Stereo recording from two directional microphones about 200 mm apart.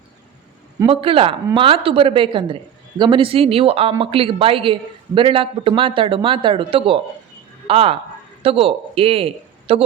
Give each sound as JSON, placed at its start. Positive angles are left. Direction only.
{"t": 0.9, "sound": "a woman's voice", "side_deg": -25}